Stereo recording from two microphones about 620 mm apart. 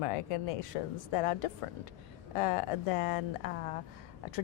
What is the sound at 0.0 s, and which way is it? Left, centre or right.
A woman's voice, left.